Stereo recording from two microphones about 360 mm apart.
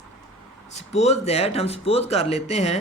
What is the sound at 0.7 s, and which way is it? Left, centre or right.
Speech, centre.